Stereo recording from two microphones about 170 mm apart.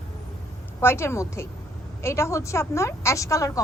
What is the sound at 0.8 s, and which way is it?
A woman's voice, 15° left (ahead or behind).